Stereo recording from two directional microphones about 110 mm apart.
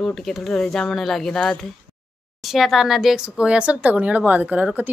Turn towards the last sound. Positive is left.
turn(degrees=-15)  # may be behind; listen again after turning